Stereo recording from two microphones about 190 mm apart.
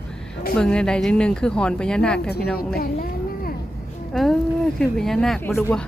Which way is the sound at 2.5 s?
50° left (ahead or behind).